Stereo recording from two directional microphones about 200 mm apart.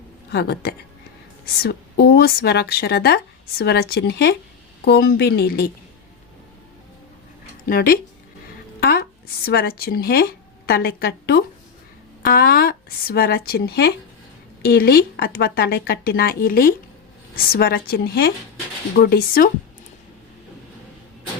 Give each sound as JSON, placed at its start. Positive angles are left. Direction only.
{"t": 0.3, "sound": "a woman's voice", "side_deg": 55}
{"t": 7.7, "sound": "speech", "side_deg": 45}